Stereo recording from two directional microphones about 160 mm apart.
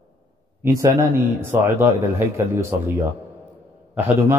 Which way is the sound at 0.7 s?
15° right (ahead or behind).